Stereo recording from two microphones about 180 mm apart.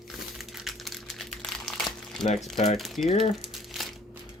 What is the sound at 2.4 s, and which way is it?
Speech, centre (ahead or behind).